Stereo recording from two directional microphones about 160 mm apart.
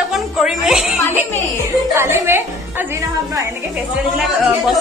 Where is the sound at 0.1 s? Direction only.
Centre (ahead or behind).